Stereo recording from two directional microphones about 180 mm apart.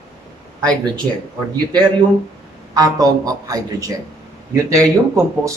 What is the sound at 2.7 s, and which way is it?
Speech, 20° right (ahead or behind).